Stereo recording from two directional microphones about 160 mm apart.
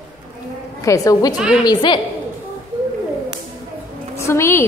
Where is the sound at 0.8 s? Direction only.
20° left (ahead or behind).